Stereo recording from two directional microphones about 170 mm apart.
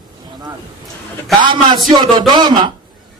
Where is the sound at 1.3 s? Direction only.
25° right (ahead or behind).